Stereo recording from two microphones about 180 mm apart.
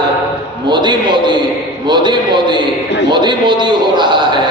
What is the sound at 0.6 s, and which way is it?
A man's voice, 25° right (ahead or behind).